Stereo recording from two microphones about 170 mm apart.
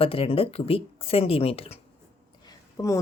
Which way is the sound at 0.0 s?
35° left (ahead or behind).